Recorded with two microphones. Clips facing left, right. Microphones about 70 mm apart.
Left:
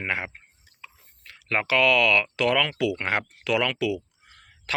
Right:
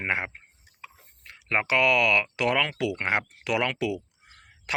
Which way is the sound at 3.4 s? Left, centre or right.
Right.